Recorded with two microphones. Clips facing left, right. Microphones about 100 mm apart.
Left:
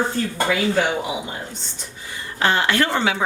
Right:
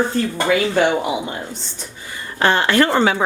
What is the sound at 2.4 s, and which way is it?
Speech, 40° right (ahead or behind).